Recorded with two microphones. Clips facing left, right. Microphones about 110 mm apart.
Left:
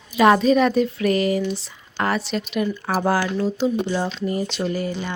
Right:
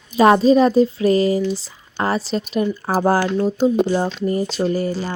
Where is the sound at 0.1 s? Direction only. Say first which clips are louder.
Right 3 dB; 30° right (ahead or behind).